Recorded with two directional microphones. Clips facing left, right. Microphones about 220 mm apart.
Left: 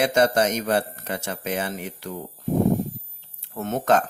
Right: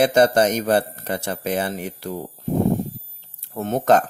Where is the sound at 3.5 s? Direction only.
30° right (ahead or behind).